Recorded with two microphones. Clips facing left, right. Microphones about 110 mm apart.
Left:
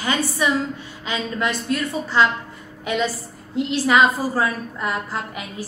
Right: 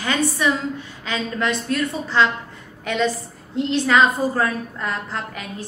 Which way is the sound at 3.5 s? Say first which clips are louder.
Even; 5° left (ahead or behind).